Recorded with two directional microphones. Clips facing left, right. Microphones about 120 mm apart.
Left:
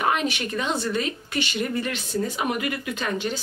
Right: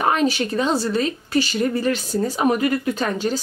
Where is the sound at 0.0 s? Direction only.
35° right (ahead or behind).